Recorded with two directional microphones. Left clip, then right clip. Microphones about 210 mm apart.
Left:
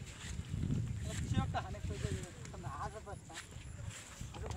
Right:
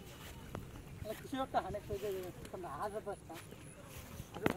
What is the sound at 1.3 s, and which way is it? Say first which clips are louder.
Speech: right 4 dB; 35° right (ahead or behind).